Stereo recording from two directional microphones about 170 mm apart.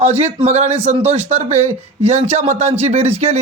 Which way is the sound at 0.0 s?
40° right (ahead or behind).